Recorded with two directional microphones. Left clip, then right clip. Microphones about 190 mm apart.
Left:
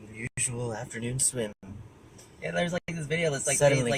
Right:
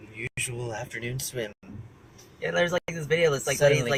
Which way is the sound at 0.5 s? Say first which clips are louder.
Right 1 dB; 15° left (ahead or behind).